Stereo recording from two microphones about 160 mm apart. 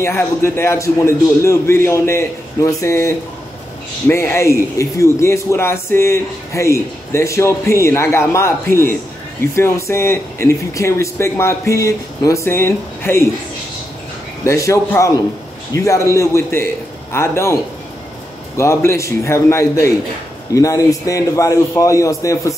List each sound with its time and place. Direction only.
0.0 s speech: 15° left (ahead or behind)
14.4 s a man's voice: 20° left (ahead or behind)
18.6 s a man's voice: 15° left (ahead or behind)